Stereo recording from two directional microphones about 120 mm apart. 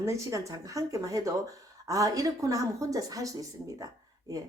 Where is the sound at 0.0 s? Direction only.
25° right (ahead or behind).